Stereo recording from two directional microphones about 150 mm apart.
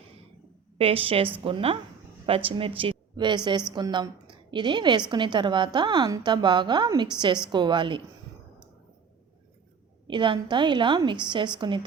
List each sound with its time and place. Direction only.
0.8 s a woman's voice: 40° right (ahead or behind)
10.1 s a woman's voice: 30° right (ahead or behind)